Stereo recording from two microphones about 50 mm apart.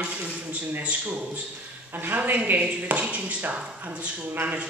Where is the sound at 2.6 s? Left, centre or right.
Right.